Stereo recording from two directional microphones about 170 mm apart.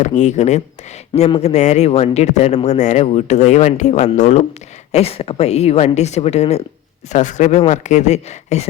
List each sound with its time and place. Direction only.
0.0 s a man's voice: 45° left (ahead or behind)